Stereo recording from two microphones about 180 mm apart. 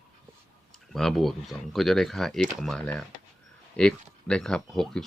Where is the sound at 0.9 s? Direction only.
Centre (ahead or behind).